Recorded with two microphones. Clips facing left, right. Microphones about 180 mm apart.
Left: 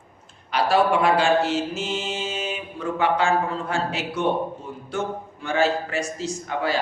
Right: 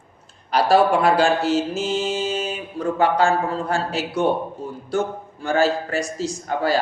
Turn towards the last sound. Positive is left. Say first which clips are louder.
# right 4 dB
turn(degrees=-40)  # may be behind; listen again after turning